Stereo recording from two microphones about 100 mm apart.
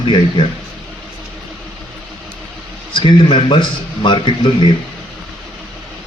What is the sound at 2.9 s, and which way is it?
Speech, 60° left (ahead or behind).